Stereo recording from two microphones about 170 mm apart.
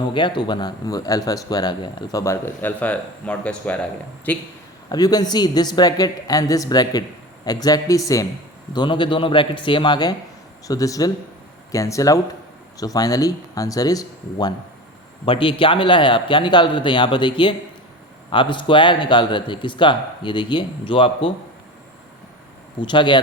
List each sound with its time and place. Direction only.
0.1 s speech: 30° left (ahead or behind); by 4.4 s 10° left (ahead or behind)
4.9 s speech: 20° left (ahead or behind)
22.8 s speech: 30° left (ahead or behind)